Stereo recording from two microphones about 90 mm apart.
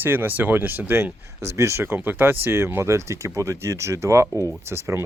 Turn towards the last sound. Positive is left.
turn(degrees=-30)  # may be behind; listen again after turning